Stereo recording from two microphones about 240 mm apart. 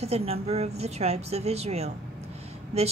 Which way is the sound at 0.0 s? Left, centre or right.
Right.